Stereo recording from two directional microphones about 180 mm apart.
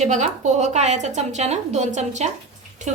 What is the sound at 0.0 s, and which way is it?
A woman's voice, 40° right (ahead or behind).